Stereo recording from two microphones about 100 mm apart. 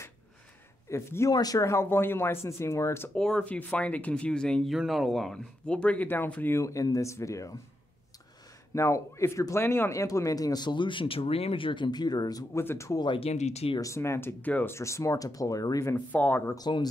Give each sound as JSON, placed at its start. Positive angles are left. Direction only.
{"t": 0.8, "sound": "speech", "side_deg": 30}
{"t": 3.2, "sound": "speech", "side_deg": 5}
{"t": 6.6, "sound": "speech", "side_deg": 35}
{"t": 8.7, "sound": "speech", "side_deg": 30}
{"t": 12.5, "sound": "speech", "side_deg": 30}
{"t": 13.2, "sound": "speech", "side_deg": 85}
{"t": 13.7, "sound": "speech", "side_deg": 30}
{"t": 16.1, "sound": "speech", "side_deg": 15}
{"t": 16.5, "sound": "speech", "side_deg": 45}